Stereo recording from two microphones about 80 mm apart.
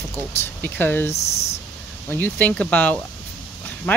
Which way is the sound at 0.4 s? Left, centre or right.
Left.